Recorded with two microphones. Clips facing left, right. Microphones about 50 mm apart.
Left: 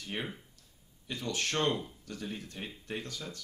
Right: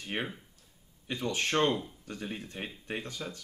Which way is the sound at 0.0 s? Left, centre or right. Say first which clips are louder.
Right 3 dB; right.